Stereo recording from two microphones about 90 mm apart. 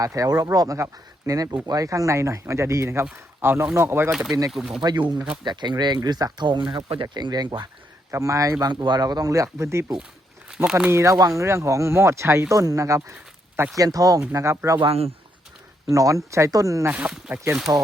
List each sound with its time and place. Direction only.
0.0 s speech: 40° right (ahead or behind)
4.3 s speech: 40° right (ahead or behind)
4.5 s speech: 5° right (ahead or behind)
4.8 s speech: 55° right (ahead or behind); by 7.1 s 70° right (ahead or behind)
7.1 s speech: 55° right (ahead or behind)
8.1 s speech: 35° right (ahead or behind)
8.7 s speech: 55° right (ahead or behind); by 9.8 s 30° right (ahead or behind)
10.5 s speech: 10° right (ahead or behind)
10.9 s speech: 35° right (ahead or behind)
14.3 s speech: 30° right (ahead or behind)
14.8 s speech: 90° right
15.9 s speech: 35° right (ahead or behind)
17.1 s speech: 15° right (ahead or behind)
17.7 s speech: 35° right (ahead or behind)